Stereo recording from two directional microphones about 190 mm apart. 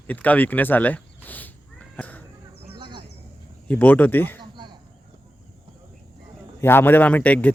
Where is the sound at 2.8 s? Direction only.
25° right (ahead or behind).